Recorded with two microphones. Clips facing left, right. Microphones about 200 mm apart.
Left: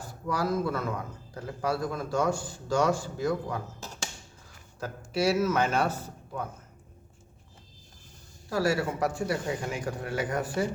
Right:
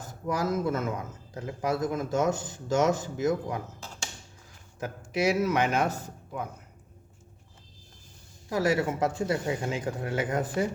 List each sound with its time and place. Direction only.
0.0 s a man's voice: 20° right (ahead or behind)
4.8 s a man's voice: 15° right (ahead or behind)
8.4 s a man's voice: 20° right (ahead or behind)